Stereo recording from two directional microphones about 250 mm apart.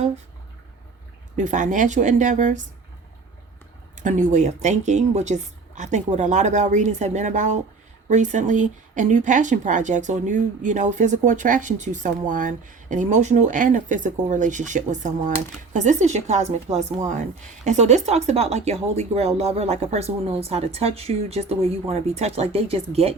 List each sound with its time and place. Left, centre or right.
1.4 s a woman's voice: right
3.9 s a woman's voice: right